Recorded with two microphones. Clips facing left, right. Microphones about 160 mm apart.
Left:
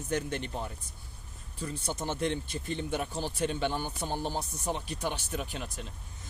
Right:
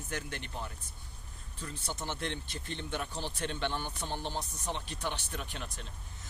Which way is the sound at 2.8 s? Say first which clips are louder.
Left 4 dB; 10° left (ahead or behind).